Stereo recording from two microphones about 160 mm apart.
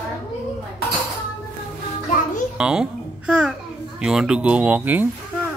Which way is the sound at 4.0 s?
5° right (ahead or behind).